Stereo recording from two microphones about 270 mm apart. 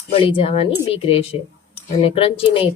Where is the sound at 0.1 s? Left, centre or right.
Left.